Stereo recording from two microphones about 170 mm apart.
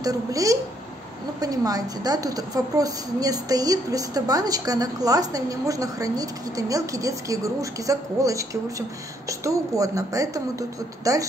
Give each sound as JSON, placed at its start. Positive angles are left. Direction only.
{"t": 0.0, "sound": "a woman's voice", "side_deg": -20}